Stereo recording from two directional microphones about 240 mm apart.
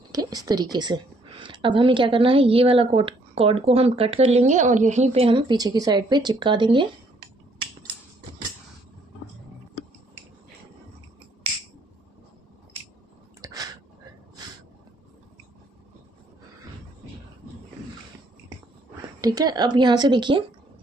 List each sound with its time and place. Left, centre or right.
0.1 s a woman's voice: centre
13.4 s a sound: centre
19.2 s speech: centre